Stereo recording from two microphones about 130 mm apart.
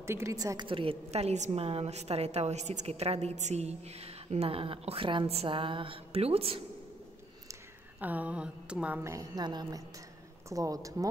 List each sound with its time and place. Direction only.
0.0 s a woman's voice: 20° right (ahead or behind)
0.7 s a woman's voice: 45° right (ahead or behind)
8.0 s speech: 10° right (ahead or behind)
9.0 s a woman's voice: 25° right (ahead or behind)